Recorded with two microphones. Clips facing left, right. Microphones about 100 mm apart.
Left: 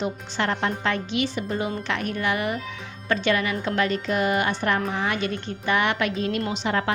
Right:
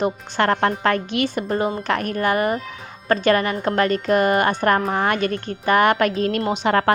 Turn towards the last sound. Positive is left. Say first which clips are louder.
# right 7 dB
turn(degrees=-55)  # may be behind; listen again after turning